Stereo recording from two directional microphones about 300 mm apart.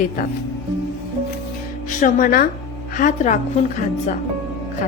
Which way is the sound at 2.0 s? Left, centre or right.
Left.